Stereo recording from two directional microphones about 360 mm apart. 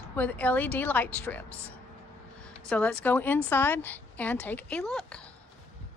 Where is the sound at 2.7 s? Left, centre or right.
Centre.